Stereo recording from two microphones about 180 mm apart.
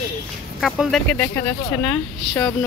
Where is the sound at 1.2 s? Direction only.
15° left (ahead or behind).